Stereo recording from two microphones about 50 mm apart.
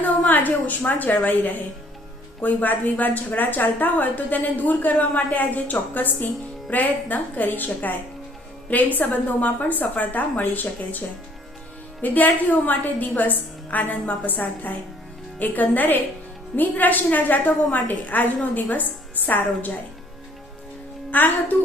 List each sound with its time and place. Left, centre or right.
0.3 s a woman's voice: left
12.0 s a woman's voice: left
21.1 s speech: left